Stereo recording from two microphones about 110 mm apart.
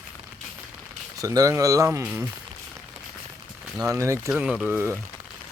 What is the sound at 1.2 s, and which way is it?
Speech, 30° right (ahead or behind).